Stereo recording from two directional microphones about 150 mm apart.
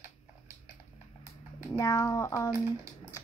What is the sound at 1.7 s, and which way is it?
Speech, 20° left (ahead or behind).